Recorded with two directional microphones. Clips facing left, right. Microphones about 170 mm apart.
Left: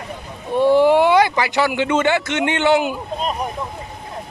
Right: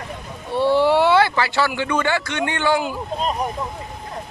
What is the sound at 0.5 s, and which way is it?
Speech, 15° left (ahead or behind).